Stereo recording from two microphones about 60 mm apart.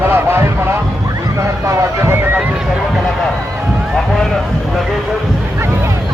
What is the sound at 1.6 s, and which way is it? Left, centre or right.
Speech, right.